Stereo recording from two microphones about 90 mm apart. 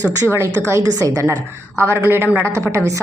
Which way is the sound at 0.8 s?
45° right (ahead or behind).